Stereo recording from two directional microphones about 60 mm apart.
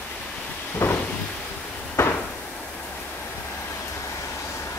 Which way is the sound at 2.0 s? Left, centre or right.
Left.